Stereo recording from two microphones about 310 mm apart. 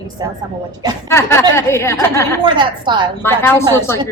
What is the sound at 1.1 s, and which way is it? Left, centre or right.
A woman's voice, centre.